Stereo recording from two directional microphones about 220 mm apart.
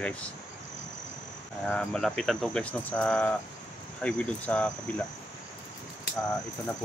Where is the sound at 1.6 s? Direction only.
Centre (ahead or behind).